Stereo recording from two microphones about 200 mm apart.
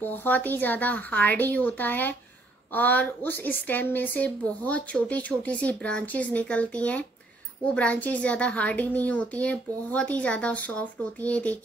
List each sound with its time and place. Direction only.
0.0 s a woman's voice: 10° left (ahead or behind)